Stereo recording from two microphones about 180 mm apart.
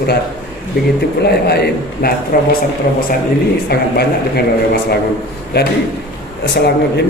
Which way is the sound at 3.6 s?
65° left (ahead or behind).